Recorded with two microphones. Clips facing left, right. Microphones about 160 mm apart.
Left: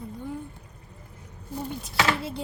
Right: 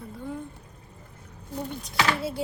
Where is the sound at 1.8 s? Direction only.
Centre (ahead or behind).